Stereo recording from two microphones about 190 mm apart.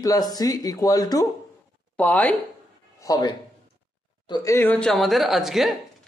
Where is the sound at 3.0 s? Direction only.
20° left (ahead or behind).